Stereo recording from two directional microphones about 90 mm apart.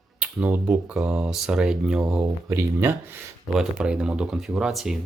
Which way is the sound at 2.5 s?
25° right (ahead or behind).